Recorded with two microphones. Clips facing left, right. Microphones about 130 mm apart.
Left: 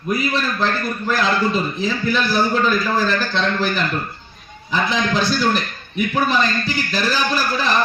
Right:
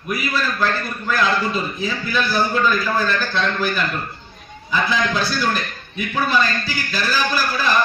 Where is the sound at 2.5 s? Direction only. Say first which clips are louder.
Left 1 dB; 25° left (ahead or behind).